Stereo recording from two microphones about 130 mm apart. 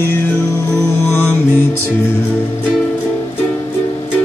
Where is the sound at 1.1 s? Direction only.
15° left (ahead or behind).